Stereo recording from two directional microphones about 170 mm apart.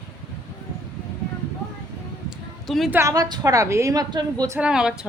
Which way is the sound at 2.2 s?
Centre (ahead or behind).